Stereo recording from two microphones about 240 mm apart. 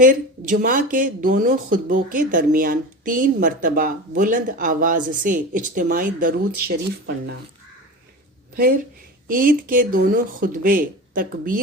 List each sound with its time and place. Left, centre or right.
0.0 s speech: right
8.5 s speech: right